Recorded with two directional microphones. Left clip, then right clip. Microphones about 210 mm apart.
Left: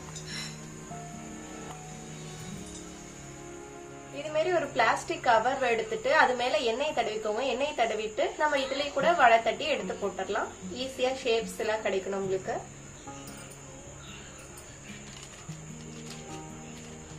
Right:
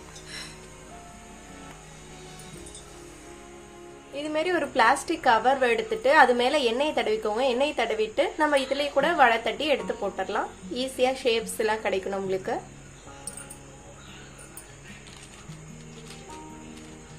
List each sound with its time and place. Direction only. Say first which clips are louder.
4.3 s a woman's voice: right 1 dB; 40° right (ahead or behind)